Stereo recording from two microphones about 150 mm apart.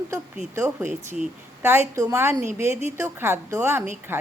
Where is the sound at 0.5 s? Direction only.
20° right (ahead or behind).